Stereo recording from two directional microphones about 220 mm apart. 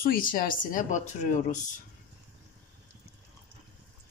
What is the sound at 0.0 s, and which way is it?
Speech, 40° left (ahead or behind).